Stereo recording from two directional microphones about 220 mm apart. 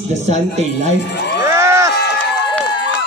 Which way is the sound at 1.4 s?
10° right (ahead or behind).